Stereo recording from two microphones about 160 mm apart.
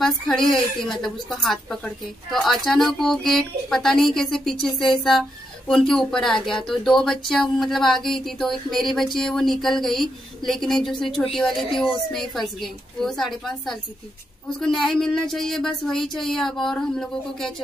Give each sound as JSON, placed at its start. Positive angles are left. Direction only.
{"t": 0.0, "sound": "speech", "side_deg": 0}